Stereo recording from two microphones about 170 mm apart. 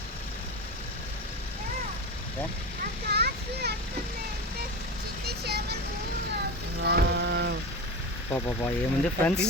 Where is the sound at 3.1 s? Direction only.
70° right (ahead or behind).